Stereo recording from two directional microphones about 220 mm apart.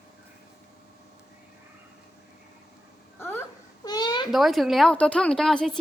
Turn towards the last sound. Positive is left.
turn(degrees=0)  # may be behind; listen again after turning